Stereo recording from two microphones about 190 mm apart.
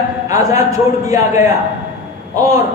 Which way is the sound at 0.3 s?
15° right (ahead or behind).